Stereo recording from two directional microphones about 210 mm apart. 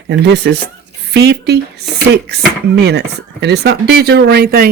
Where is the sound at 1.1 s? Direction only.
50° right (ahead or behind).